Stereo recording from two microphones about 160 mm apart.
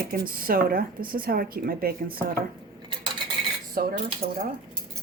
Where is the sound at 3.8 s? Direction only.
65° right (ahead or behind).